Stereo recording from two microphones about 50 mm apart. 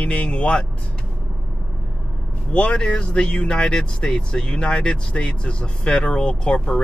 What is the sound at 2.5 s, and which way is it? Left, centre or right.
Speech, left.